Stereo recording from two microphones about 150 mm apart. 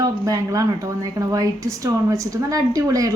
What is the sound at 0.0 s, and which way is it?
A woman's voice, 25° right (ahead or behind).